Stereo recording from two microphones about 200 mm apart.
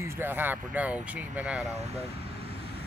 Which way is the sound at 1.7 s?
30° right (ahead or behind).